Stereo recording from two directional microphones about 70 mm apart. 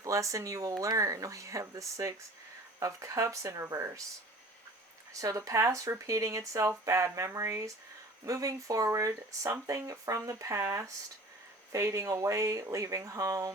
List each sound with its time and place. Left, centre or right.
0.0 s speech: right
5.2 s speech: right